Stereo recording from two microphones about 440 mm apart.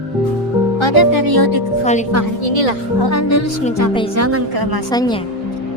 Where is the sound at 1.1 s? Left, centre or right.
Right.